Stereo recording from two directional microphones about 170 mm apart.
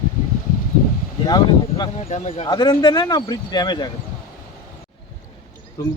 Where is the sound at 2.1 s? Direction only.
40° left (ahead or behind).